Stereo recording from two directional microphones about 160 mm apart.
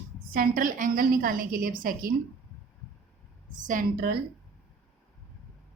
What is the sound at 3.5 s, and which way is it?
Speech, 55° right (ahead or behind).